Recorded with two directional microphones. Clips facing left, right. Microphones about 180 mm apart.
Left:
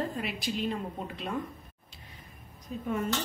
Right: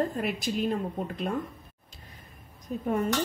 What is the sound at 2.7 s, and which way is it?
Speech, 50° right (ahead or behind).